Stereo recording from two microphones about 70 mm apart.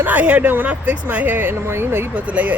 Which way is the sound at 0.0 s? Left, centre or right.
Right.